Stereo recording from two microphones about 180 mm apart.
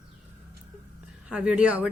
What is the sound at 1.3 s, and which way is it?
Speech, 5° right (ahead or behind).